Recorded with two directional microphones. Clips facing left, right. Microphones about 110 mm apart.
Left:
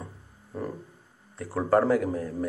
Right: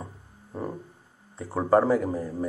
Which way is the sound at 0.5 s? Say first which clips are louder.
Even; 25° right (ahead or behind).